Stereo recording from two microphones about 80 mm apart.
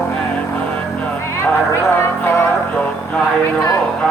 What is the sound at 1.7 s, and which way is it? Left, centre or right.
Music, left.